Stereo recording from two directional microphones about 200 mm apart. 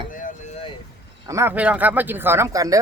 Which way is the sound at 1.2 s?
15° right (ahead or behind).